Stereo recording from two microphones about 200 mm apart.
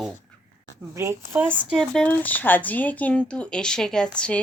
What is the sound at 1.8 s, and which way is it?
A man's voice, 5° left (ahead or behind).